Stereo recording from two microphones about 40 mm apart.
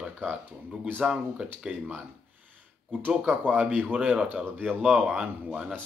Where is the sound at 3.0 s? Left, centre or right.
Right.